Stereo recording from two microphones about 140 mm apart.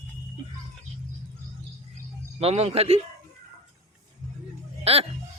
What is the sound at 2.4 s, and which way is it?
Speech, 45° right (ahead or behind).